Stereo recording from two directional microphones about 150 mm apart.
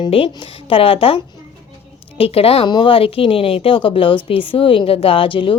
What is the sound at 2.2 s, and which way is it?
Speech, 40° left (ahead or behind).